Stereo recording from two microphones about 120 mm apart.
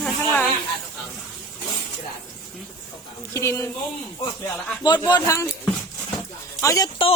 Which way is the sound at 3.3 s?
25° left (ahead or behind).